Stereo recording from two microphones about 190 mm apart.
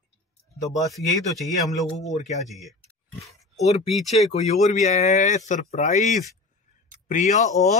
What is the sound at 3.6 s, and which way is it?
Speech, 35° left (ahead or behind).